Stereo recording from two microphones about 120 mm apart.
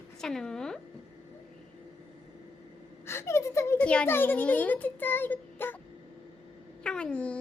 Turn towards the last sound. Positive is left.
turn(degrees=10)  # may be behind; listen again after turning